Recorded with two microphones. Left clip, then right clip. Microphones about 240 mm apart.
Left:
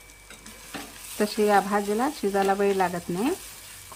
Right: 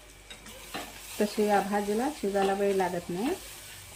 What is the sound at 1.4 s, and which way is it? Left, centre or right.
Speech, centre.